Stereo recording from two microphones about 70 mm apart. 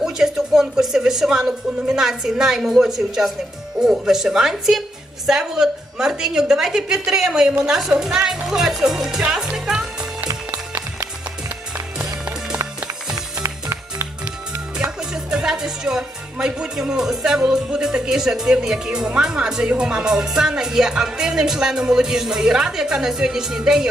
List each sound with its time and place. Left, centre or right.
0.0 s music: centre
10.2 s music: right
11.9 s music: centre
13.4 s music: right
14.8 s music: centre